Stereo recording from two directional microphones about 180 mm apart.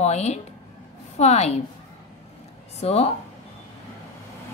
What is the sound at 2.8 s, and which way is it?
Speech, 35° left (ahead or behind).